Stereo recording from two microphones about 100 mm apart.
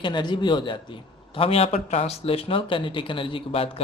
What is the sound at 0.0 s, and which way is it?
A man's voice, 50° left (ahead or behind).